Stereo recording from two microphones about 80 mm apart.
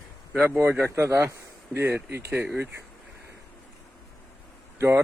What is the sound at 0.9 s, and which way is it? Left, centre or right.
Speech, right.